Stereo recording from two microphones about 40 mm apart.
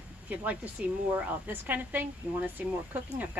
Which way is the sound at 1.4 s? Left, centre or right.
Right.